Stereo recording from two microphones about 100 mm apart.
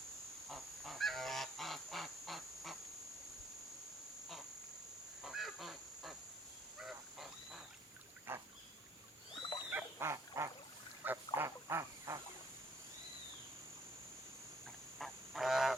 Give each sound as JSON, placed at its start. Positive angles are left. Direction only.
{"t": 0.4, "sound": "goose", "side_deg": 0}
{"t": 5.2, "sound": "insect", "side_deg": -5}
{"t": 6.7, "sound": "frog", "side_deg": 0}
{"t": 8.3, "sound": "duck", "side_deg": -20}
{"t": 9.6, "sound": "duck", "side_deg": -20}
{"t": 11.0, "sound": "a sound", "side_deg": -20}
{"t": 11.3, "sound": "duck", "side_deg": -30}
{"t": 14.9, "sound": "frog", "side_deg": 5}